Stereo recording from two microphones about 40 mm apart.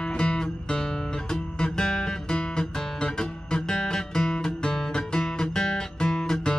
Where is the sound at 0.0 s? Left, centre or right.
Left.